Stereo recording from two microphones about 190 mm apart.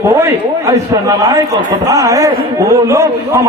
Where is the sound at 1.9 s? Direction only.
15° right (ahead or behind).